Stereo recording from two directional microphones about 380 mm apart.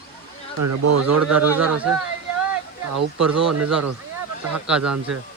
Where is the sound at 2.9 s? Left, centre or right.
Right.